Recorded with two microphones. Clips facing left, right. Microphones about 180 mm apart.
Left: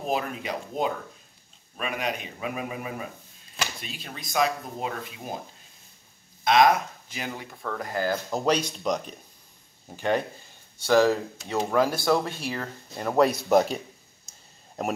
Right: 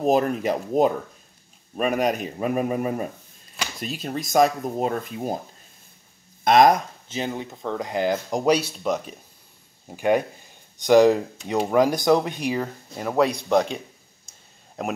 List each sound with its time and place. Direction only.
0.0 s speech: 45° right (ahead or behind)
6.4 s speech: 45° right (ahead or behind)
7.1 s speech: 25° right (ahead or behind)
12.9 s speech: centre (ahead or behind)